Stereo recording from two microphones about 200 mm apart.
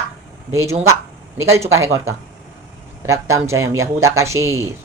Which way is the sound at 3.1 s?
15° right (ahead or behind).